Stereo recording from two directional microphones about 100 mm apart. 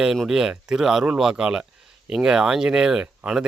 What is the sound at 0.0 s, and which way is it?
Speech, 5° right (ahead or behind).